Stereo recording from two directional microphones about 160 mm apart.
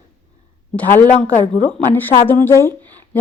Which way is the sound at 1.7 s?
10° left (ahead or behind).